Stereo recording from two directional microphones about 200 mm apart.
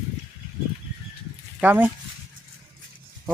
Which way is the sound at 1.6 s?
10° right (ahead or behind).